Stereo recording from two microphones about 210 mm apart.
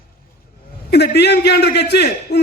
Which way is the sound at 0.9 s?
50° left (ahead or behind).